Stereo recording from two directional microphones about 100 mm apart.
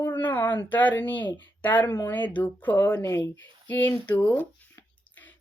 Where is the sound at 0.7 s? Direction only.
15° left (ahead or behind).